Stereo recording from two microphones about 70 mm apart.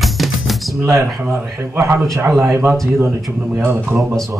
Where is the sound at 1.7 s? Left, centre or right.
Right.